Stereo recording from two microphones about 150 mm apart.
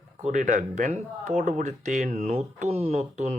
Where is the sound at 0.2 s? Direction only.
55° right (ahead or behind).